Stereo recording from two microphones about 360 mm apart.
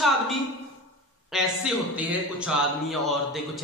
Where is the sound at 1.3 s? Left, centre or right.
Centre.